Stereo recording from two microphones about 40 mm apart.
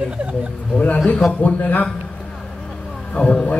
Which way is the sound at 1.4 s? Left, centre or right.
Left.